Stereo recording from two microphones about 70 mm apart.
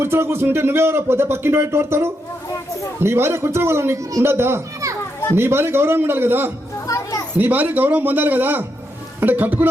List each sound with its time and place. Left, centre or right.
0.0 s speech: right
6.8 s children playing: left
7.3 s speech: right